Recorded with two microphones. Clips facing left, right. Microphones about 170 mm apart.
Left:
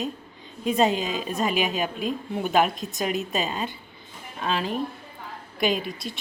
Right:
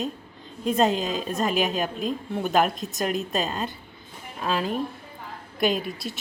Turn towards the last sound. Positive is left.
turn(degrees=0)  # may be behind; listen again after turning